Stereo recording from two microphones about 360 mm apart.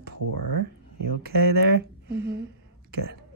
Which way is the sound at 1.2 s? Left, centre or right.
Right.